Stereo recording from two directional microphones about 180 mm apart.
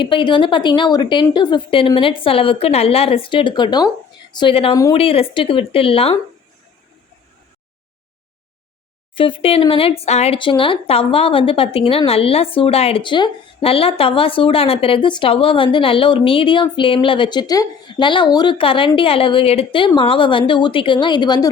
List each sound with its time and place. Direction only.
0.0 s a woman's voice: 30° left (ahead or behind)
4.7 s speech: 20° left (ahead or behind)
4.9 s speech: 30° left (ahead or behind)
9.1 s speech: 30° left (ahead or behind)